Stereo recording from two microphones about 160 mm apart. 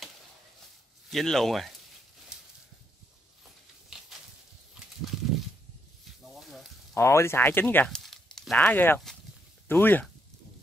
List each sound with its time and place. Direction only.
1.1 s speech: centre (ahead or behind)
6.4 s sizzle: centre (ahead or behind)
7.0 s speech: 15° left (ahead or behind)